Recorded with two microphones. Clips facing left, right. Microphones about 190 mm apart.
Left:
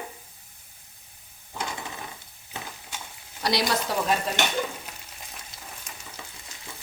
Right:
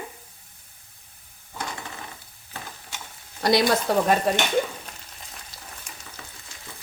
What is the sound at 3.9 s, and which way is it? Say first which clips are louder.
Speech: right 6 dB; 50° right (ahead or behind).